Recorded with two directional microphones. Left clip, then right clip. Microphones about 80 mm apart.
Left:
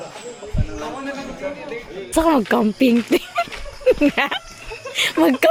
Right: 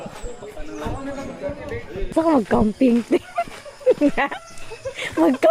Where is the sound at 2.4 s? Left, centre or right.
Left.